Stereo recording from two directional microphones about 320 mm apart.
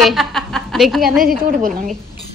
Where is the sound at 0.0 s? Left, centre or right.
Centre.